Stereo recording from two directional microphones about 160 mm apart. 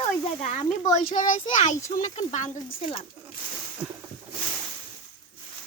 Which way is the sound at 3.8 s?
5° right (ahead or behind).